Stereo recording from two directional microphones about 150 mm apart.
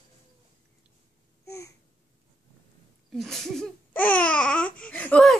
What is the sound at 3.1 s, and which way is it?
Babbling, centre (ahead or behind).